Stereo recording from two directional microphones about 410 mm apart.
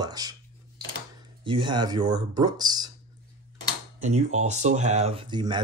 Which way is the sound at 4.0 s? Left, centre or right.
Centre.